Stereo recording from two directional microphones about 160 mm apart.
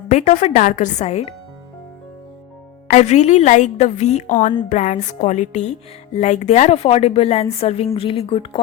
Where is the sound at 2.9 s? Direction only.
45° left (ahead or behind).